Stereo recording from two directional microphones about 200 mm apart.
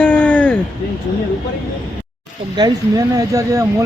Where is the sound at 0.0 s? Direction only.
5° left (ahead or behind).